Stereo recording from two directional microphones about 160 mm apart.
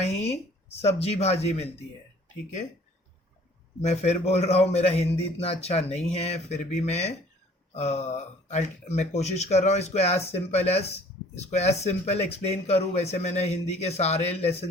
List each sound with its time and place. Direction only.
0.2 s speech: 40° left (ahead or behind)
3.8 s speech: 40° left (ahead or behind)